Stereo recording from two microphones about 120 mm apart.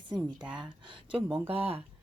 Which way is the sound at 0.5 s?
40° right (ahead or behind).